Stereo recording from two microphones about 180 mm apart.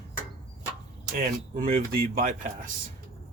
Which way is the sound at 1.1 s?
50° right (ahead or behind).